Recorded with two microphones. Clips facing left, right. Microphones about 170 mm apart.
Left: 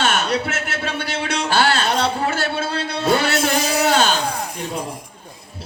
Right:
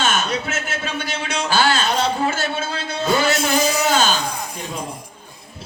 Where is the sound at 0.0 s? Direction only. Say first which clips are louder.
Left 2 dB; 65° left (ahead or behind).